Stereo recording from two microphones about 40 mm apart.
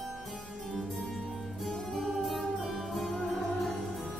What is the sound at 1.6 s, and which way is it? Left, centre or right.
Music, centre.